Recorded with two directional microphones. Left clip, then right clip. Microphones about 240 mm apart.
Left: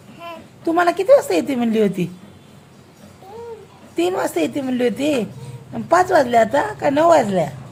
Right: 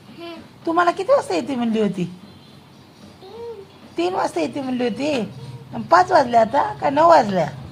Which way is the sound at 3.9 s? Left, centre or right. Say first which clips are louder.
Left 1 dB; left.